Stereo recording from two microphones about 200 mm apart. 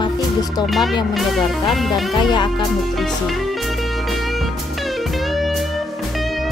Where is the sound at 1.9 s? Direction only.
20° left (ahead or behind).